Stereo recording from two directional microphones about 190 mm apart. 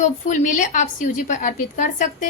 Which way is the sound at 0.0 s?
40° left (ahead or behind).